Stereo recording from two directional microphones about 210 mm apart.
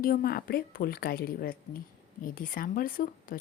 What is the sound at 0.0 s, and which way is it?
A woman's voice, 45° left (ahead or behind).